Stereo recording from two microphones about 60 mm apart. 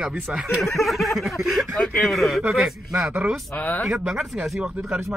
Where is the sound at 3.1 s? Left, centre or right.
Right.